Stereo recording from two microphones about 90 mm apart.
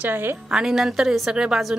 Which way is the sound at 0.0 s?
20° right (ahead or behind).